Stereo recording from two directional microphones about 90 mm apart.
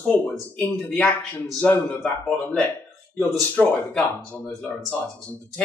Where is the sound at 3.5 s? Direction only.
15° left (ahead or behind).